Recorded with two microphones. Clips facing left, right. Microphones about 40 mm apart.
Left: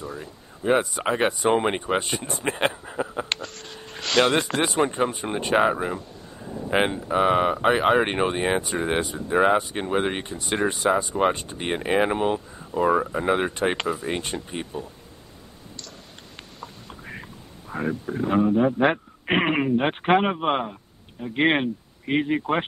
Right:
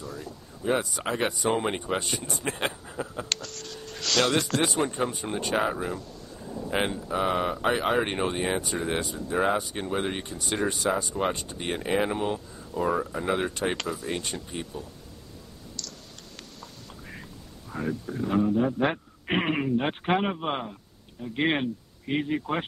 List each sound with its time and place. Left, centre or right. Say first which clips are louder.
0.0 s speech: left 3 dB; left
16.5 s a sound: left 4 dB; left
18.7 s speech: left 5 dB; left